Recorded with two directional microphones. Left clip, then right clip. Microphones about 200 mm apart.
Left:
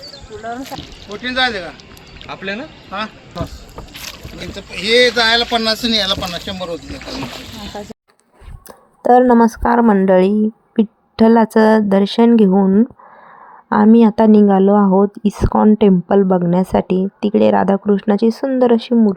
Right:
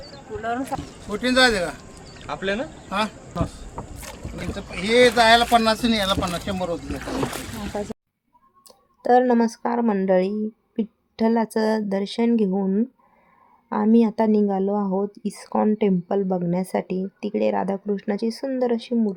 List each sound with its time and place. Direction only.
0.7 s speech: centre (ahead or behind)
1.1 s speech: 70° right (ahead or behind)
2.2 s speech: 35° left (ahead or behind)
2.9 s speech: 70° right (ahead or behind)
4.8 s speech: 10° left (ahead or behind)
6.8 s speech: 60° right (ahead or behind)
7.7 s speech: 5° right (ahead or behind)
9.0 s a woman's voice: 25° left (ahead or behind)